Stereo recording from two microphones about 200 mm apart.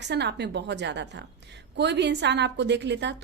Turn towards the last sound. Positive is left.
turn(degrees=-60)  # may be behind; listen again after turning